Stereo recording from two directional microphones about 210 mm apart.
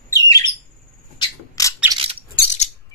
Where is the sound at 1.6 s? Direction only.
15° left (ahead or behind).